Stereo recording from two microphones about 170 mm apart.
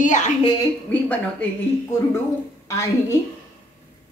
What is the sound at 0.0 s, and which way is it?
Speech, 50° left (ahead or behind).